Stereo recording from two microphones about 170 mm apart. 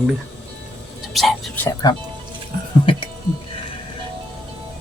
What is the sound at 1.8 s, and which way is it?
Speech, 25° left (ahead or behind).